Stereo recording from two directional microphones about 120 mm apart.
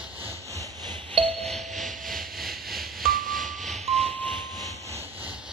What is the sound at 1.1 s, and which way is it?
Ding, 55° right (ahead or behind).